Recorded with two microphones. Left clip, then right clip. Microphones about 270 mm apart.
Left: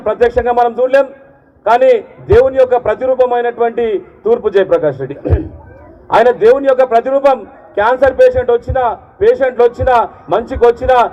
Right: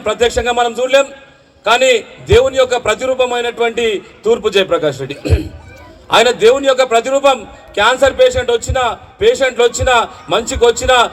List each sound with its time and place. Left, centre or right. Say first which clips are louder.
0.0 s a man's voice: left 2 dB; right